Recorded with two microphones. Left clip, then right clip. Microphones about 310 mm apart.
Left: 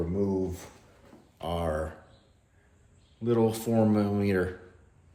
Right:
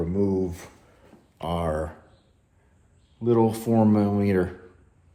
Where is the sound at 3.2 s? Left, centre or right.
Right.